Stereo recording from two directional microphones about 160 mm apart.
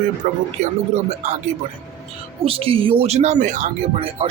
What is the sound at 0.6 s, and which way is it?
Speech, 45° right (ahead or behind).